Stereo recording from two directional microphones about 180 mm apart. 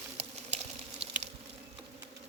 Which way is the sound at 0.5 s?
35° right (ahead or behind).